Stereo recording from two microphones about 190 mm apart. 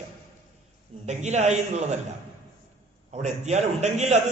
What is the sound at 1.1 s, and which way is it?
Speech, 35° right (ahead or behind).